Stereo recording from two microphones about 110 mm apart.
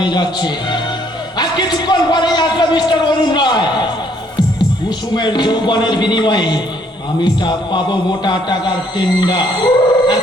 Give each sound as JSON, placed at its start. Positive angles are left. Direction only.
{"t": 0.0, "sound": "a man's voice", "side_deg": 40}
{"t": 4.9, "sound": "a man's voice", "side_deg": 40}